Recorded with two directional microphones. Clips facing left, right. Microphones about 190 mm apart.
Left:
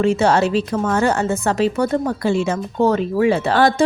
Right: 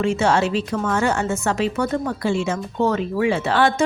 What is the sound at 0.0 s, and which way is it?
A woman's voice, 40° left (ahead or behind).